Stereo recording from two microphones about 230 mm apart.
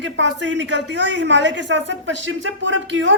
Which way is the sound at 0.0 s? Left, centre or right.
Right.